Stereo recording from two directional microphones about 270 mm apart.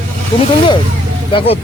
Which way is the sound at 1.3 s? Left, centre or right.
Centre.